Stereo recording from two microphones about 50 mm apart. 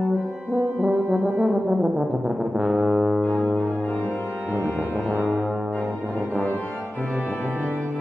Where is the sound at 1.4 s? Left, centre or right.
Centre.